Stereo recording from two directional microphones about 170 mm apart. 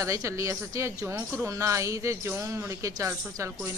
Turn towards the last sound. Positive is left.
turn(degrees=-15)  # may be behind; listen again after turning